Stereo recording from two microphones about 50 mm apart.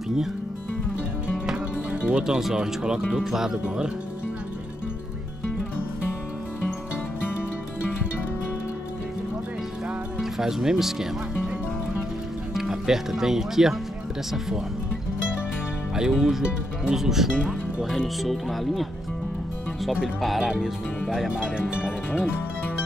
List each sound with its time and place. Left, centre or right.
1.9 s music: right
2.2 s speech: centre
3.6 s speech: centre
10.3 s speech: centre
12.5 s speech: centre
15.9 s speech: centre
20.2 s speech: centre
20.4 s speech: centre